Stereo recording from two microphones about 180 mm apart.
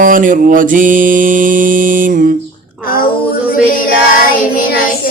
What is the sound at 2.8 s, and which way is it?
Speech, 55° left (ahead or behind).